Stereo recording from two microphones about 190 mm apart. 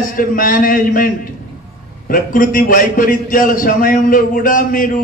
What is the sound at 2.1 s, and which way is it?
A man's voice, 45° left (ahead or behind).